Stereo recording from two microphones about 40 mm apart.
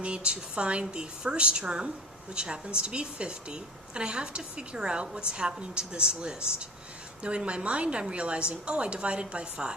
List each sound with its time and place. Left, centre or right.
0.0 s a woman's voice: right